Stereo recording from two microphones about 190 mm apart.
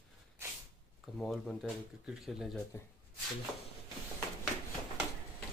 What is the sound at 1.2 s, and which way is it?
Speech, centre (ahead or behind).